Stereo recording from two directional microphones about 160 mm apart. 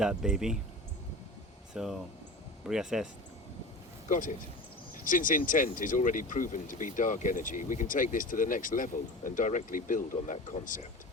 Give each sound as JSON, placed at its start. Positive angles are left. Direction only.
{"t": 0.0, "sound": "speech", "side_deg": -5}
{"t": 1.7, "sound": "speech", "side_deg": -5}
{"t": 4.1, "sound": "speech", "side_deg": 55}